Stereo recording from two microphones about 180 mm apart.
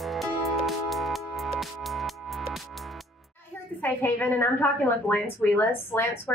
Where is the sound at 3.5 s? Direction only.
10° left (ahead or behind).